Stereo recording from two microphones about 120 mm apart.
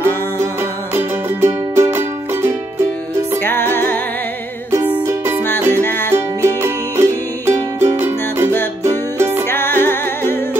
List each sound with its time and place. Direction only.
0.9 s music: 20° right (ahead or behind)
3.4 s music: 20° left (ahead or behind)
5.0 s music: 20° right (ahead or behind)
5.7 s music: 20° left (ahead or behind)
6.1 s music: 20° right (ahead or behind)
9.5 s music: 20° left (ahead or behind)